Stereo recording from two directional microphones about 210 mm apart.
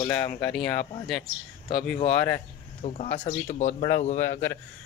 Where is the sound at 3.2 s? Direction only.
35° left (ahead or behind).